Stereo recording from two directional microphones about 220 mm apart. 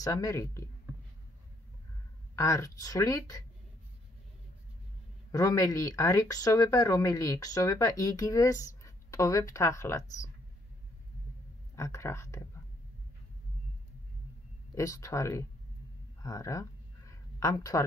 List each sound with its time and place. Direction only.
0.0 s speech: 15° left (ahead or behind)
2.3 s speech: 15° left (ahead or behind)
5.3 s speech: 15° left (ahead or behind)
11.7 s speech: 15° left (ahead or behind)
14.8 s speech: 15° left (ahead or behind)
16.2 s a sound: 15° left (ahead or behind)